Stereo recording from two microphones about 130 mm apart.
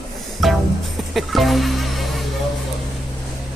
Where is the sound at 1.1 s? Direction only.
Centre (ahead or behind).